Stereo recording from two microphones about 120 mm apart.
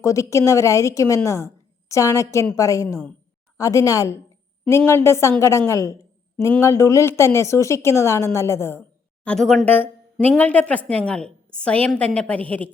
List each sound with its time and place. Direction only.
0.0 s a woman's voice: 25° left (ahead or behind)
9.2 s speech: 5° left (ahead or behind)
9.6 s a woman's voice: 15° left (ahead or behind)